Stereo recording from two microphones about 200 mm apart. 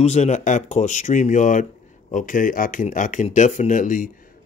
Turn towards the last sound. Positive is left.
turn(degrees=40)  # may be behind; listen again after turning